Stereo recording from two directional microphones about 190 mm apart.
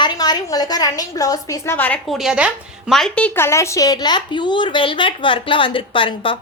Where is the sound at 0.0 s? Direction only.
20° left (ahead or behind).